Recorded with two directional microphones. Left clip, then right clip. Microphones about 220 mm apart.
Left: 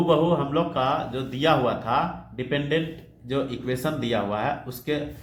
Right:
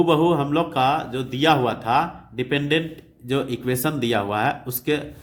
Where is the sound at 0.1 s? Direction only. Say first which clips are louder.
Right 2 dB; 45° right (ahead or behind).